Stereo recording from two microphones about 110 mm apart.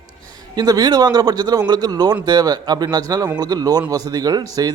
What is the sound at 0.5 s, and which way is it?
A man's voice, 35° right (ahead or behind).